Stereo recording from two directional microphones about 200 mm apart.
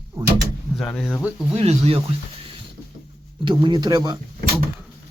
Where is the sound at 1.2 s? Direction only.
5° right (ahead or behind).